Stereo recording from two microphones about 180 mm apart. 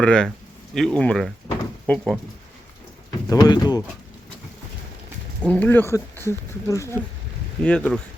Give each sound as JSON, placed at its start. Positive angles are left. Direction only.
{"t": 0.0, "sound": "speech", "side_deg": 5}
{"t": 1.5, "sound": "drawer open or close", "side_deg": 10}
{"t": 3.2, "sound": "speech", "side_deg": 20}
{"t": 5.4, "sound": "speech", "side_deg": 10}